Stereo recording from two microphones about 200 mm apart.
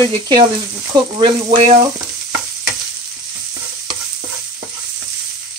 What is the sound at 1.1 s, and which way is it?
Frying, 25° right (ahead or behind).